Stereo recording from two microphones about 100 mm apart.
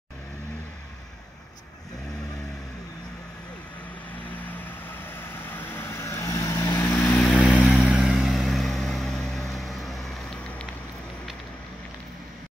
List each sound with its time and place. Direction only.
5.6 s vehicle: 25° left (ahead or behind)
7.6 s vehicle: centre (ahead or behind)